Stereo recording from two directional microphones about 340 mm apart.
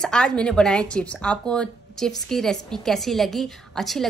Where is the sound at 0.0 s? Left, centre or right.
Centre.